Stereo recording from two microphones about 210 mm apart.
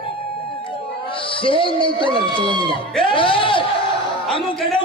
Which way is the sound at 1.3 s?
25° left (ahead or behind).